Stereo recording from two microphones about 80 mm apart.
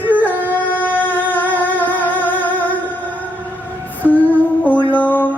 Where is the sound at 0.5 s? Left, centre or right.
Left.